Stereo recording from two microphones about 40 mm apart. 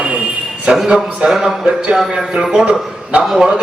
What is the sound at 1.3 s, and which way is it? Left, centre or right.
Speech, centre.